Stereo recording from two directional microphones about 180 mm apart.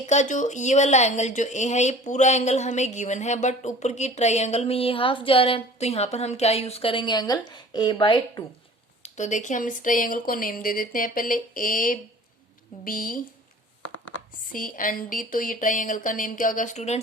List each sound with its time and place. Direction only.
0.0 s speech: 40° left (ahead or behind)
9.0 s speech: 40° left (ahead or behind)
14.5 s speech: 50° left (ahead or behind)